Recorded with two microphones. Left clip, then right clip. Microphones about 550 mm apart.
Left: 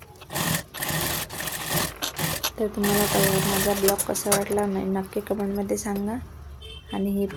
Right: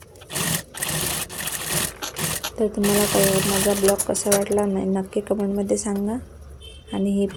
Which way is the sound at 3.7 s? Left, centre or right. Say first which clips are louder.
Right 5 dB; left.